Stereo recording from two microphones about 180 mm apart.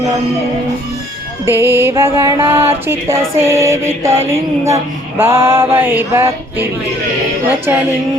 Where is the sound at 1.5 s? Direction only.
10° right (ahead or behind).